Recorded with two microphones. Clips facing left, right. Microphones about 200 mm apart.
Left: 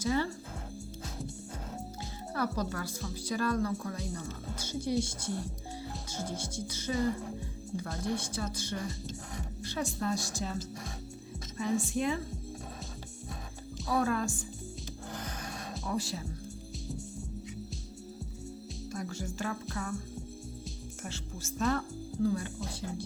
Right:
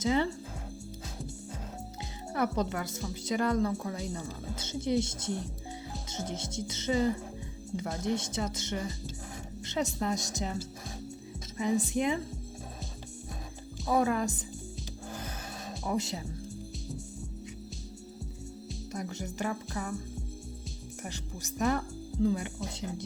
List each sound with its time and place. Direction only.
0.0 s speech: 20° right (ahead or behind)
2.3 s speech: 20° right (ahead or behind)
13.8 s speech: 15° right (ahead or behind)
15.1 s music: 5° right (ahead or behind)
15.9 s speech: 20° right (ahead or behind)
18.9 s music: 20° right (ahead or behind)
21.0 s music: 15° right (ahead or behind)
22.8 s speech: 20° right (ahead or behind)